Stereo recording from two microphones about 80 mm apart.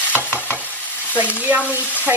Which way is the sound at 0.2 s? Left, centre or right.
Left.